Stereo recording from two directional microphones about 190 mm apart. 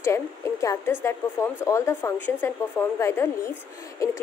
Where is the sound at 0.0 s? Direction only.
15° left (ahead or behind).